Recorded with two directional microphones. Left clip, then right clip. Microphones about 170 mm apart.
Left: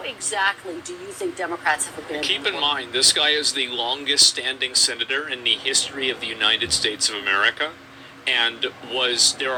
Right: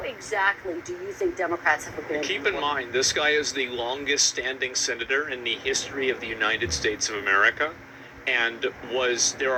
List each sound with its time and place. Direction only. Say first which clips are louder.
0.0 s a woman's voice: left 2 dB; 30° left (ahead or behind)